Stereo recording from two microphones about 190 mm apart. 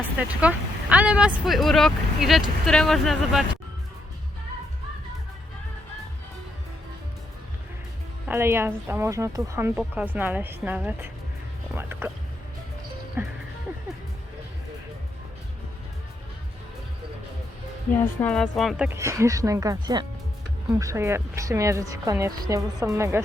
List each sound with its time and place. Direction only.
0.2 s a woman's voice: 5° right (ahead or behind)
8.3 s a woman's voice: 15° right (ahead or behind)
13.2 s a woman's voice: 10° right (ahead or behind)
18.0 s a woman's voice: 10° left (ahead or behind)
18.9 s a woman's voice: 15° right (ahead or behind)